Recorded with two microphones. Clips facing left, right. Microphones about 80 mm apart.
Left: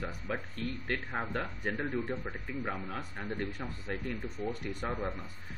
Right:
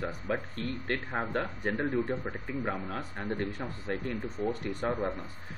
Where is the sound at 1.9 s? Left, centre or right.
Centre.